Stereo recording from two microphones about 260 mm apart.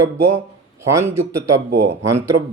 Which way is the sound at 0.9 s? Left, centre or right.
Centre.